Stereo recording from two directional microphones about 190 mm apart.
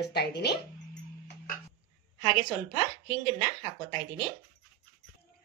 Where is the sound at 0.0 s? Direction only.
60° left (ahead or behind).